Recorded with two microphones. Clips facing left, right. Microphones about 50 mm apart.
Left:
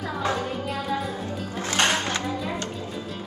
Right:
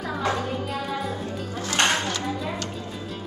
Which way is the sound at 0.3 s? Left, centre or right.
Centre.